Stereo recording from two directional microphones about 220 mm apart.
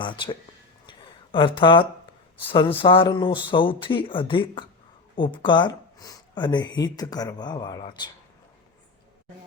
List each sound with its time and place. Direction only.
0.0 s speech: 20° left (ahead or behind)
0.9 s a sound: 20° left (ahead or behind)
2.7 s speech: 25° left (ahead or behind)